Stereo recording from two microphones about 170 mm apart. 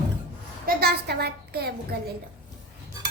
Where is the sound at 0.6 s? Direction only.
65° right (ahead or behind).